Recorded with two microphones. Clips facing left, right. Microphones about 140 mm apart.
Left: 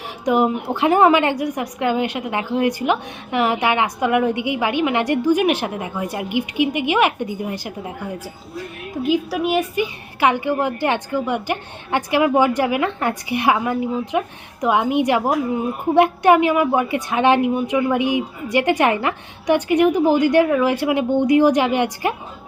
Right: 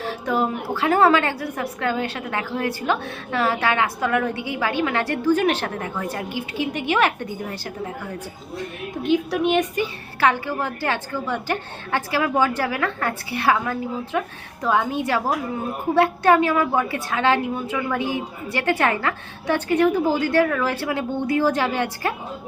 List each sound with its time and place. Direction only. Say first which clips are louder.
0.0 s a woman's voice: left 5 dB; 15° left (ahead or behind)
9.0 s a woman's voice: even; 5° left (ahead or behind)